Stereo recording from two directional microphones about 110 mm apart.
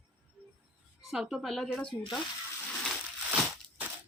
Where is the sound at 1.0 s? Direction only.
5° right (ahead or behind).